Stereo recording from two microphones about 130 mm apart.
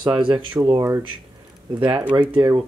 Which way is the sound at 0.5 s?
25° right (ahead or behind).